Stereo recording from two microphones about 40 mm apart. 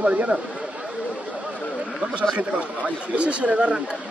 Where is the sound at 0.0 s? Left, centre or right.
Right.